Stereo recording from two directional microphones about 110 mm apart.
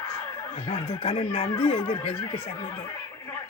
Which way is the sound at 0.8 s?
60° left (ahead or behind).